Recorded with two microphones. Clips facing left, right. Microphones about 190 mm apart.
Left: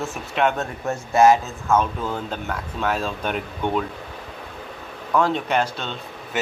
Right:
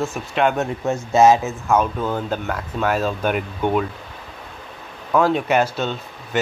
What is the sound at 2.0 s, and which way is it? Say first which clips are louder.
Speech: right 4 dB; centre (ahead or behind).